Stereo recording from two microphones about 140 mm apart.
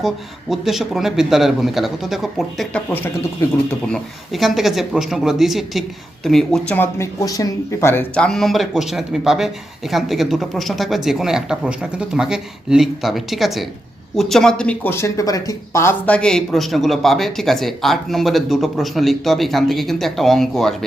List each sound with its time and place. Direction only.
0.5 s speech: centre (ahead or behind)
3.9 s speech: centre (ahead or behind)
6.7 s speech: 15° left (ahead or behind)
8.1 s speech: 5° left (ahead or behind)
14.9 s speech: 20° left (ahead or behind); by 20.7 s centre (ahead or behind)